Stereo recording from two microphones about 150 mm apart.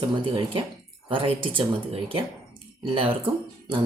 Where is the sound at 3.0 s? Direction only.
35° right (ahead or behind).